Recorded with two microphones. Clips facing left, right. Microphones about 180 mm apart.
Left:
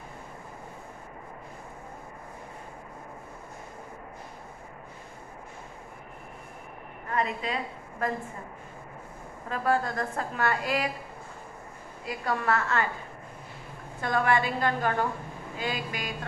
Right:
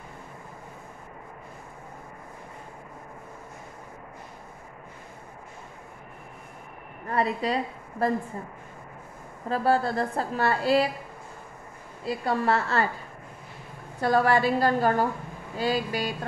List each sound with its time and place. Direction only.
7.1 s a woman's voice: 35° right (ahead or behind)
9.5 s a woman's voice: 30° right (ahead or behind)
12.0 s a woman's voice: 30° right (ahead or behind)
14.0 s a woman's voice: 35° right (ahead or behind)